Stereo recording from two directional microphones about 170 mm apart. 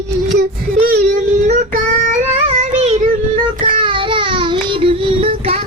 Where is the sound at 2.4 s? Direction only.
35° right (ahead or behind).